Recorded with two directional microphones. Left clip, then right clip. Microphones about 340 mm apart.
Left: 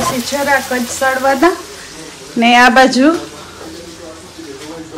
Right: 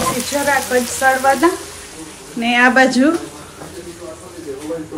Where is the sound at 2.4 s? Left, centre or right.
Centre.